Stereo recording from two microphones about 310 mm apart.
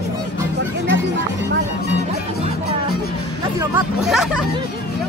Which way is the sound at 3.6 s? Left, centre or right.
Centre.